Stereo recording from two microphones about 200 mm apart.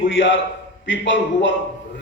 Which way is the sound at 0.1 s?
70° left (ahead or behind).